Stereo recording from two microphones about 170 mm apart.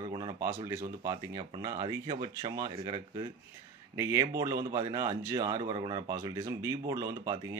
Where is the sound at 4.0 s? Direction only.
15° right (ahead or behind).